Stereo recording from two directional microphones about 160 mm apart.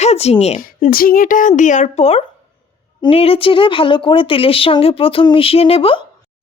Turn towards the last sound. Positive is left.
turn(degrees=35)  # may be behind; listen again after turning